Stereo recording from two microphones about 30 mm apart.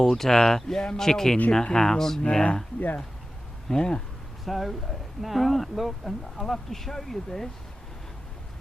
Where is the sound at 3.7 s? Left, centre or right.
Left.